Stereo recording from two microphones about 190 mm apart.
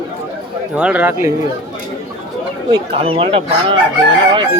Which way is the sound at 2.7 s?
30° right (ahead or behind).